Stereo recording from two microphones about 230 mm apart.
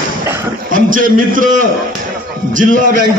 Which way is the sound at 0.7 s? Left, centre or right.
Right.